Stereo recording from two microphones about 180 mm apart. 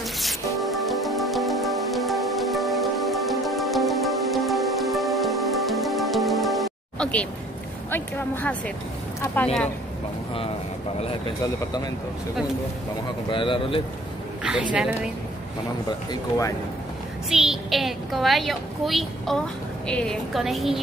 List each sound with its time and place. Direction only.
0.6 s music: centre (ahead or behind)
7.9 s speech: 10° left (ahead or behind)
11.0 s speech: 30° left (ahead or behind)
13.3 s speech: 30° left (ahead or behind)
14.4 s a woman's voice: 5° right (ahead or behind)
16.1 s speech: 15° left (ahead or behind)
17.3 s a child's voice: 5° right (ahead or behind)